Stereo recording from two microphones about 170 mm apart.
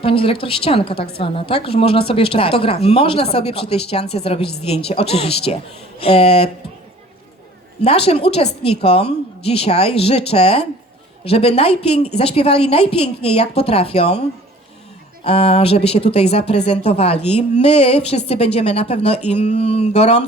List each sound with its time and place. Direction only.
0.0 s a woman's voice: 30° left (ahead or behind)
0.9 s a woman's voice: 70° left (ahead or behind)
1.2 s a woman's voice: 35° left (ahead or behind)
7.8 s a woman's voice: 35° left (ahead or behind)
15.2 s a woman's voice: 35° left (ahead or behind)